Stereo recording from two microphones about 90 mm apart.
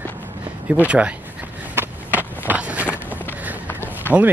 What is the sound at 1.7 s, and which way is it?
Skateboard, 20° right (ahead or behind).